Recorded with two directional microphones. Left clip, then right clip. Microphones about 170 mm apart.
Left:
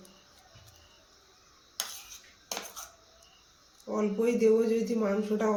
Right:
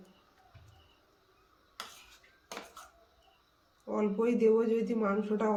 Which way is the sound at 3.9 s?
5° right (ahead or behind).